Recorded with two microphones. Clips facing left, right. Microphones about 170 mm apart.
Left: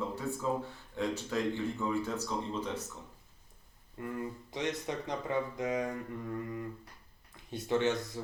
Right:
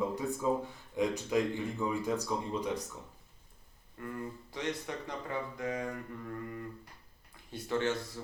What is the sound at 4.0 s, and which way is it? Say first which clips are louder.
Speech: left 2 dB; 20° left (ahead or behind).